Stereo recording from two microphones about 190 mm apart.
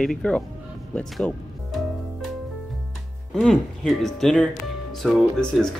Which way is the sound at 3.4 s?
Centre (ahead or behind).